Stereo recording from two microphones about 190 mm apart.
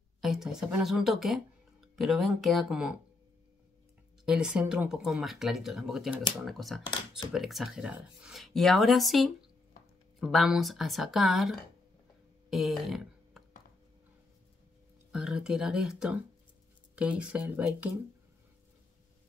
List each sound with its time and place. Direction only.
0.2 s speech: centre (ahead or behind)
4.3 s speech: 5° right (ahead or behind)
12.4 s a sound: centre (ahead or behind)
15.1 s speech: 5° right (ahead or behind)